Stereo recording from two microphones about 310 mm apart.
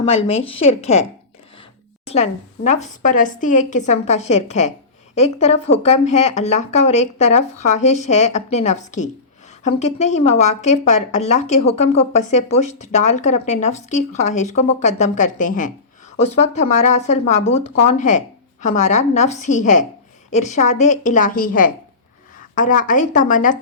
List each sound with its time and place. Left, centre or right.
0.0 s speech: centre
2.0 s speech: left